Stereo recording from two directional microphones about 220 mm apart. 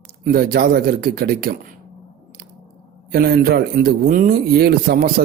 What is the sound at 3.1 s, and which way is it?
A man's voice, 45° right (ahead or behind).